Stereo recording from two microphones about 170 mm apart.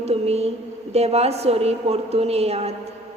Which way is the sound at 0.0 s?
40° right (ahead or behind).